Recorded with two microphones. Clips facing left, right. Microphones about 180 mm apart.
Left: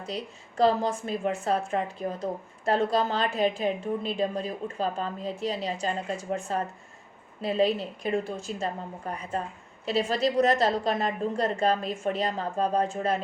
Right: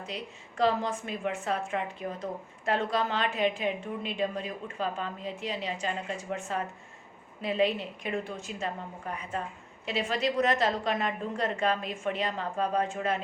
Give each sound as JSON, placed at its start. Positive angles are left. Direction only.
{"t": 0.1, "sound": "a woman's voice", "side_deg": 35}
{"t": 7.4, "sound": "a woman's voice", "side_deg": 35}